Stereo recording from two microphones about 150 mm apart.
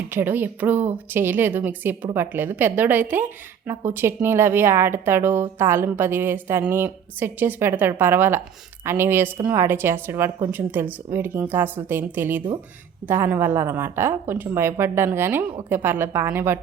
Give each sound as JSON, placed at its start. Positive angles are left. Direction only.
{"t": 0.1, "sound": "a woman's voice", "side_deg": -15}